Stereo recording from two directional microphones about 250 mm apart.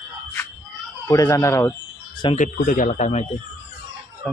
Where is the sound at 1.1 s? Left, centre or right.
Centre.